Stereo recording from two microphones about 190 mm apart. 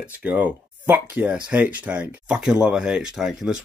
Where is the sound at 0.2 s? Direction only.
10° right (ahead or behind).